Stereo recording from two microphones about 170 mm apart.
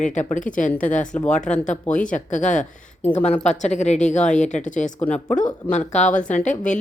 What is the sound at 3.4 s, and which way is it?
Speech, 45° left (ahead or behind).